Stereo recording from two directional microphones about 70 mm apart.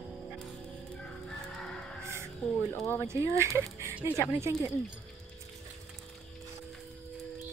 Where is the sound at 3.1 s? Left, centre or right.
Right.